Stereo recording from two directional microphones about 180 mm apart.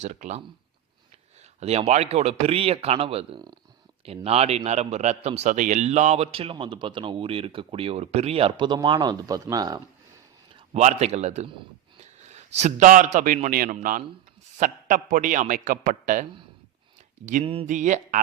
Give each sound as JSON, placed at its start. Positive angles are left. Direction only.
{"t": 0.0, "sound": "a man's voice", "side_deg": -40}
{"t": 1.5, "sound": "a man's voice", "side_deg": -35}
{"t": 10.8, "sound": "a man's voice", "side_deg": -40}
{"t": 17.4, "sound": "a man's voice", "side_deg": -30}
{"t": 17.7, "sound": "a man's voice", "side_deg": -45}